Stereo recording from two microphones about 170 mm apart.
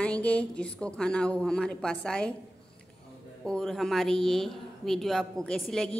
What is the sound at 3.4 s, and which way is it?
A woman's voice, centre (ahead or behind).